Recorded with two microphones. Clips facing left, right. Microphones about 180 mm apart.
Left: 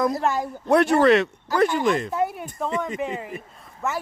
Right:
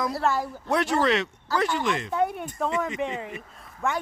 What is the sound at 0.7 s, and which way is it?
Speech, 60° left (ahead or behind).